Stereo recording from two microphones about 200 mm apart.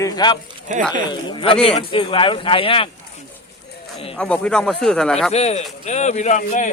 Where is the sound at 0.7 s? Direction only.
40° right (ahead or behind).